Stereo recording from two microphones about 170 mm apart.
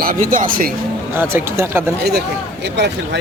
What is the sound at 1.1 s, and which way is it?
Speech, 15° right (ahead or behind).